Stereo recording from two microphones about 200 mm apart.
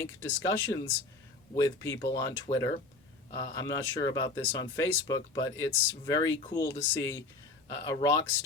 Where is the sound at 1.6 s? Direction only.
15° left (ahead or behind).